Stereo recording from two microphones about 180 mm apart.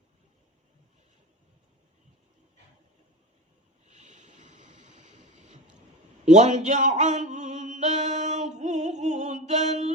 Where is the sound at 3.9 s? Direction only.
40° right (ahead or behind).